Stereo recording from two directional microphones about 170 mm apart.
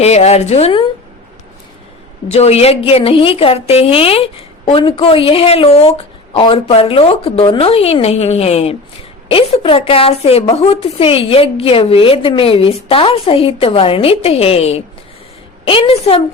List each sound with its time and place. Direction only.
0.0 s a woman's voice: 40° left (ahead or behind)
2.3 s a woman's voice: 40° left (ahead or behind)